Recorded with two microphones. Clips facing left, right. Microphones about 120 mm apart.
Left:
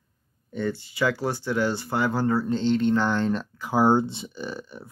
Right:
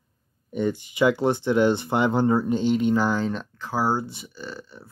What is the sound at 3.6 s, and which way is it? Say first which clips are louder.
Speech: left 4 dB; 20° left (ahead or behind).